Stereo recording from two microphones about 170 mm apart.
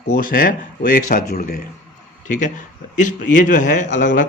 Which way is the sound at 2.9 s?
50° left (ahead or behind).